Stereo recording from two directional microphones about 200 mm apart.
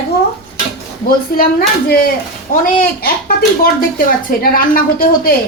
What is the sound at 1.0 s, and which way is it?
A woman's voice, 45° left (ahead or behind).